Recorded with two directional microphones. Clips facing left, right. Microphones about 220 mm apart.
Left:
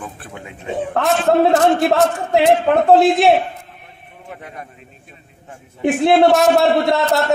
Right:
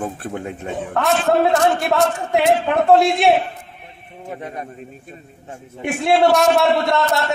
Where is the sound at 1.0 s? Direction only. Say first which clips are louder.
Left 2 dB; centre (ahead or behind).